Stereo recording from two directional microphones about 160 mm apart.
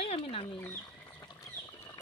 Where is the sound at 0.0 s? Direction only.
35° left (ahead or behind).